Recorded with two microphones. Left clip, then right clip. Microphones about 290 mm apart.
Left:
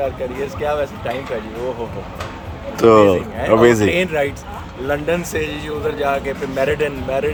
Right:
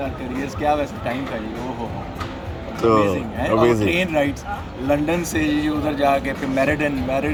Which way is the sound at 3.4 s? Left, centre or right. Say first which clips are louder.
Left 5 dB; centre.